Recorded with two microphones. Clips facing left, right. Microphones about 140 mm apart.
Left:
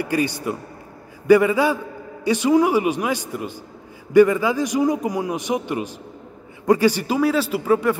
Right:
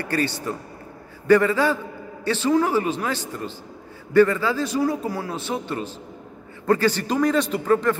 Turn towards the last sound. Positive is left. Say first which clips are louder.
# left 1 dB
turn(degrees=10)  # may be behind; listen again after turning